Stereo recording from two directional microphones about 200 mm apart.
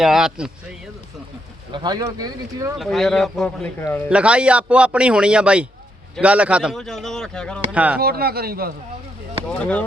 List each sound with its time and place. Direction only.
0.0 s a man's voice: centre (ahead or behind)
1.7 s speech: 20° right (ahead or behind)
2.7 s a man's voice: centre (ahead or behind)
4.1 s a man's voice: 5° right (ahead or behind)
7.7 s speech: 5° right (ahead or behind)
7.9 s speech: 50° right (ahead or behind)
9.5 s speech: 5° left (ahead or behind)